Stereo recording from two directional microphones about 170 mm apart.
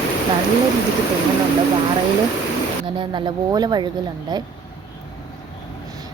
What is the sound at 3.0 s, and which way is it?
A woman's voice, 25° right (ahead or behind).